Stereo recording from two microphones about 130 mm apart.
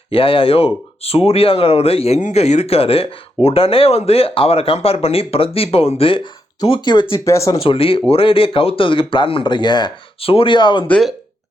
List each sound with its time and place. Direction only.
0.1 s speech: 45° left (ahead or behind)
7.3 s speech: 25° left (ahead or behind)
7.6 s speech: 45° left (ahead or behind)
10.8 s speech: 5° left (ahead or behind)